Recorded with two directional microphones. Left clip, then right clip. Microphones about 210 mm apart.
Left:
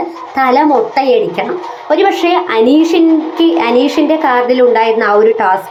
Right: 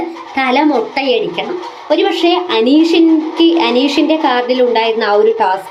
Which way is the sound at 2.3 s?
5° right (ahead or behind).